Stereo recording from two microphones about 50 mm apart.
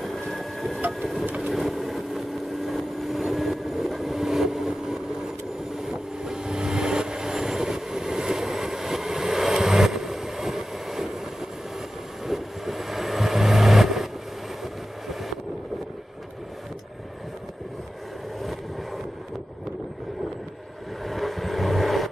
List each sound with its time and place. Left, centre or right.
0.0 s a sound: centre
0.7 s a sound: right
1.2 s vehicle: right
1.5 s vehicle: centre
12.3 s vehicle: centre
21.0 s vehicle: centre